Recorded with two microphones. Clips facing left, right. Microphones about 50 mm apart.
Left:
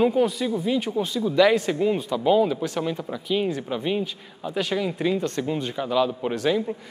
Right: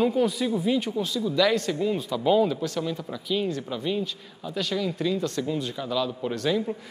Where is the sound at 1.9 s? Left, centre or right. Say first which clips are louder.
Even; centre.